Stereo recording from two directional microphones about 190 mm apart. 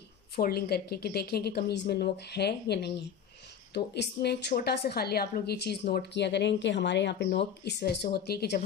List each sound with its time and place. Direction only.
0.4 s a woman's voice: 55° left (ahead or behind)